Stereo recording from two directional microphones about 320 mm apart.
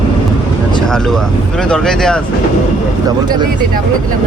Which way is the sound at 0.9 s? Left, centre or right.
Centre.